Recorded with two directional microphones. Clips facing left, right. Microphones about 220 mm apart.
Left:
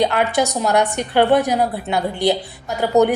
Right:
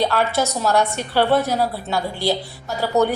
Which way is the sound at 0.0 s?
15° left (ahead or behind).